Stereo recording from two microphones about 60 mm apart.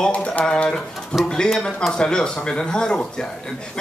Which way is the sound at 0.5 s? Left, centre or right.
Centre.